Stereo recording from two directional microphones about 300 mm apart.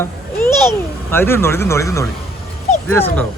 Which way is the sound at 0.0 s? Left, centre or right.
Centre.